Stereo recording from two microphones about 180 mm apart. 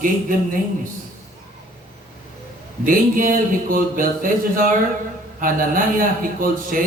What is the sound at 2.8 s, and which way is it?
Speech, 50° right (ahead or behind).